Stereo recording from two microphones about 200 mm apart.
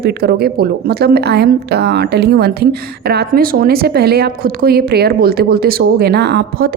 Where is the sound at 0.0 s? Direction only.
50° right (ahead or behind).